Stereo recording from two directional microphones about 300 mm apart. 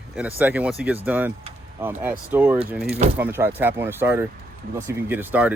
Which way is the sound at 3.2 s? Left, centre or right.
Centre.